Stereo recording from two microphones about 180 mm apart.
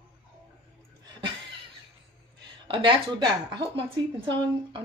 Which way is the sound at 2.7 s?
25° right (ahead or behind).